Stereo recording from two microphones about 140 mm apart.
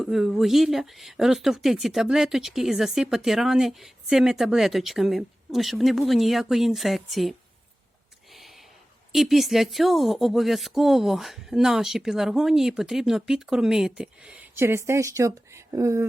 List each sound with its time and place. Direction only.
0.0 s speech: centre (ahead or behind)
8.3 s a sound: centre (ahead or behind)
9.1 s speech: centre (ahead or behind)
14.5 s speech: 15° right (ahead or behind)